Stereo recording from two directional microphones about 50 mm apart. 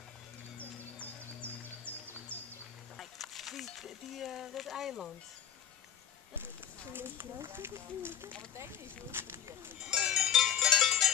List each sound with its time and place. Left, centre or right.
1.0 s music: left
3.0 s a sound: centre
6.9 s speech: right
10.0 s cowbell: centre